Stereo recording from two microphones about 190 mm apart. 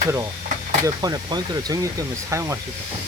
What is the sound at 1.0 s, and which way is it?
Speech, 20° right (ahead or behind).